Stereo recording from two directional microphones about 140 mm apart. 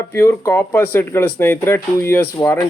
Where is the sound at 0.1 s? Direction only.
15° left (ahead or behind).